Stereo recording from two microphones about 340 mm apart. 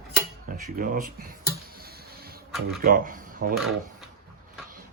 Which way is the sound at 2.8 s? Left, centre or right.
Right.